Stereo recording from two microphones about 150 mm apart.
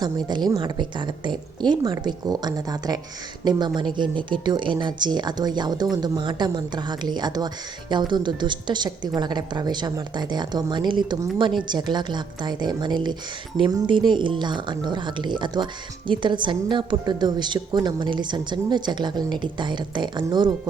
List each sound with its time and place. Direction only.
0.0 s a woman's voice: 30° right (ahead or behind)